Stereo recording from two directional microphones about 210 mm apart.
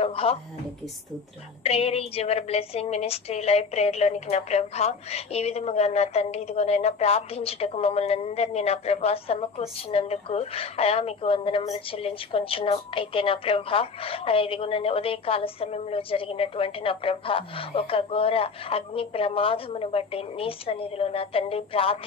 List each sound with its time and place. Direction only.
0.0 s a woman's voice: 25° left (ahead or behind)
1.6 s a woman's voice: 30° left (ahead or behind)